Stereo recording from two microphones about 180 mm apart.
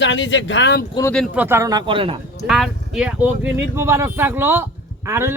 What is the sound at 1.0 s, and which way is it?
Speech, 25° left (ahead or behind).